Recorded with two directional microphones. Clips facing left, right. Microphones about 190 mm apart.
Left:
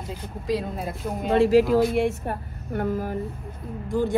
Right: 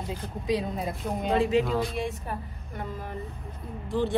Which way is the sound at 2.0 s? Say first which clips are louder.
Left 8 dB; 65° left (ahead or behind).